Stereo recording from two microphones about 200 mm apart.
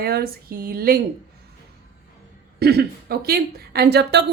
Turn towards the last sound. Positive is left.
turn(degrees=-55)  # may be behind; listen again after turning